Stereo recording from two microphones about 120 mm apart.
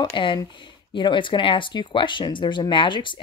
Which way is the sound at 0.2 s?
40° left (ahead or behind).